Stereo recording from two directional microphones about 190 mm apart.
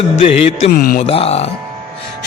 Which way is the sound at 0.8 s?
50° left (ahead or behind).